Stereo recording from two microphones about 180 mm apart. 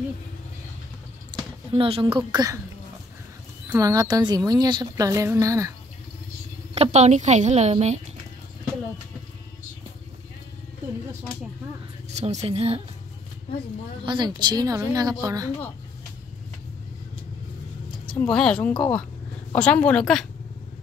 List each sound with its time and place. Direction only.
1.3 s a sound: 25° right (ahead or behind)
1.7 s speech: 30° right (ahead or behind)
3.7 s speech: 20° right (ahead or behind)
6.7 s a woman's voice: 35° right (ahead or behind)
12.1 s a woman's voice: 40° right (ahead or behind)
14.0 s speech: 25° right (ahead or behind)
18.2 s a woman's voice: 5° left (ahead or behind)
18.7 s speech: 25° left (ahead or behind)
19.5 s a woman's voice: 5° left (ahead or behind)